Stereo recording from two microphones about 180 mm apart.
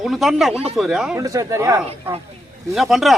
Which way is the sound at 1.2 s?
15° right (ahead or behind).